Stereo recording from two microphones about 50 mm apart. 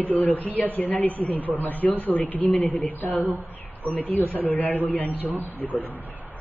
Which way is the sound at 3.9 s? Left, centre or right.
Left.